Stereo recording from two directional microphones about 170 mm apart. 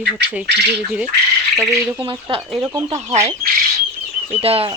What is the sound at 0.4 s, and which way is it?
Speech, 85° right.